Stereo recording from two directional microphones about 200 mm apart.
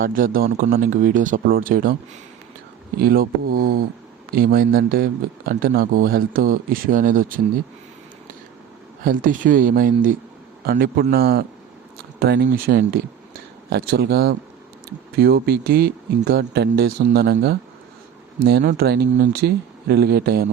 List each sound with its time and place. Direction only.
0.0 s speech: 45° right (ahead or behind)
3.0 s speech: 50° right (ahead or behind)
9.0 s a man's voice: 40° right (ahead or behind)